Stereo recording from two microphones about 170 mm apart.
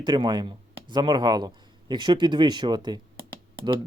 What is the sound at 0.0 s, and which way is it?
Speech, 25° right (ahead or behind).